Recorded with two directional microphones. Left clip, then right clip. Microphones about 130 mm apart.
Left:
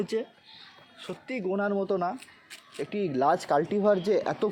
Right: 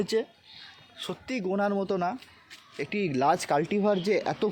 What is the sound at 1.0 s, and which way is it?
Speech, 60° right (ahead or behind).